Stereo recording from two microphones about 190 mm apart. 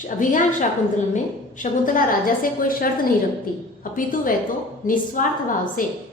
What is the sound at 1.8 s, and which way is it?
A woman's voice, 45° left (ahead or behind).